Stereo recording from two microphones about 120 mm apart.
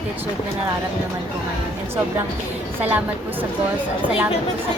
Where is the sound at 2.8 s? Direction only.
15° right (ahead or behind).